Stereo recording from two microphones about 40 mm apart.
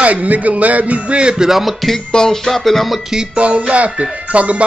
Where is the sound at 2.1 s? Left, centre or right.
Centre.